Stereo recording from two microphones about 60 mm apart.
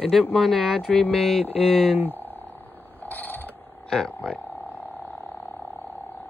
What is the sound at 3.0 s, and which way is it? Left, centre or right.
Mechanisms, left.